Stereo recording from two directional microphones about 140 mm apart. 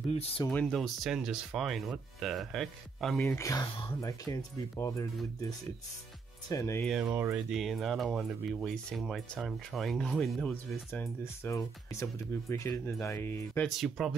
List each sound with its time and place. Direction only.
0.5 s speech: 5° left (ahead or behind)
3.2 s speech: 15° left (ahead or behind)
6.5 s speech: 25° left (ahead or behind)
6.8 s speech: centre (ahead or behind); by 13.7 s 15° left (ahead or behind)
13.7 s speech: centre (ahead or behind)